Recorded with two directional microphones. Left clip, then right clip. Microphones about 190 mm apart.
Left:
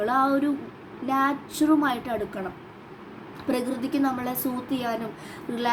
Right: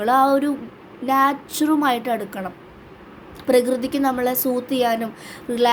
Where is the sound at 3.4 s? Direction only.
30° right (ahead or behind).